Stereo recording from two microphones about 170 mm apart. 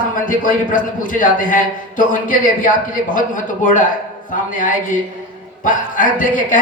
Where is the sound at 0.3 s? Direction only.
50° left (ahead or behind).